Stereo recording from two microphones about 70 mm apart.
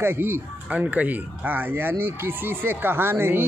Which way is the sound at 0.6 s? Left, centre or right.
Centre.